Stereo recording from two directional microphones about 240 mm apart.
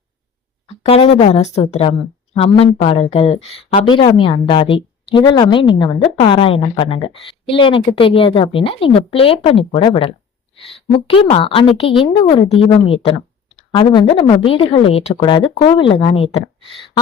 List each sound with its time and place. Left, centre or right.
0.8 s a woman's voice: left